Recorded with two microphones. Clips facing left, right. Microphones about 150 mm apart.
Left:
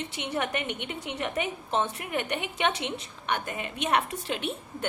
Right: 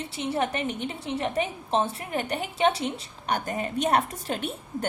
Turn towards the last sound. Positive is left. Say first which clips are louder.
# right 2 dB
turn(degrees=-40)  # may be behind; listen again after turning